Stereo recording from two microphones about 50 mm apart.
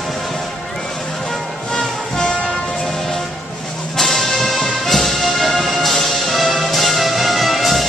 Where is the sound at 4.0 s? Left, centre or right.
Centre.